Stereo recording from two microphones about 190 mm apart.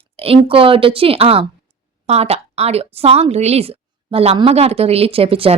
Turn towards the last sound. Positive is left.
turn(degrees=-30)  # may be behind; listen again after turning